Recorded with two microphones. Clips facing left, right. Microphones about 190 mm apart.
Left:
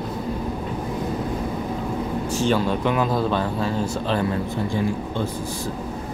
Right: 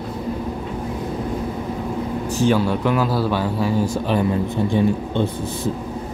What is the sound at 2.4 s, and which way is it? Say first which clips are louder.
A man's voice: right 4 dB; 10° right (ahead or behind).